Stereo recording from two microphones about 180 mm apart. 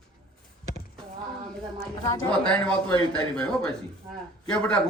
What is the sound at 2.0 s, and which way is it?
Speech, 20° left (ahead or behind).